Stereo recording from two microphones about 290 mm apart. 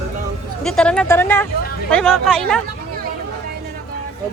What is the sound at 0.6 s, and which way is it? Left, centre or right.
Speech, centre.